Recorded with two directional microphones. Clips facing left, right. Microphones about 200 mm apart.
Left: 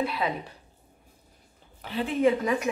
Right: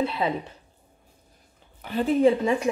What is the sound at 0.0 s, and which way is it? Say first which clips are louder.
Speech: right 3 dB; 25° right (ahead or behind).